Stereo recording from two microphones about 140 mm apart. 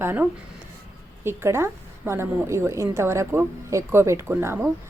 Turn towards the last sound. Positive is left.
turn(degrees=-15)  # may be behind; listen again after turning